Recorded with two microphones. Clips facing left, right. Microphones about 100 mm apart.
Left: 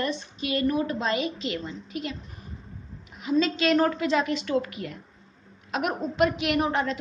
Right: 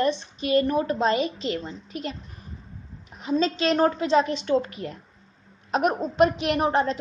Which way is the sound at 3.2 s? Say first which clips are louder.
Even; 35° right (ahead or behind).